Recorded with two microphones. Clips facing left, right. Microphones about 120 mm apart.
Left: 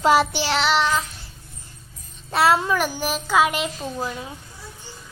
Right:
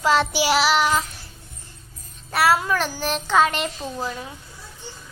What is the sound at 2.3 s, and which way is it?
Child singing, 25° left (ahead or behind).